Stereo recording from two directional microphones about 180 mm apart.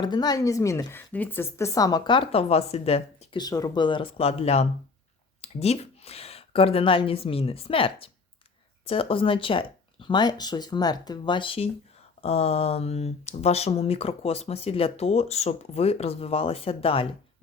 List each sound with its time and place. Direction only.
0.0 s a woman's voice: 25° left (ahead or behind)
3.4 s a woman's voice: 20° left (ahead or behind)